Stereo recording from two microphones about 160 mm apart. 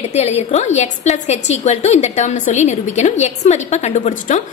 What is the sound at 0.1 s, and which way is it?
A woman's voice, 40° left (ahead or behind).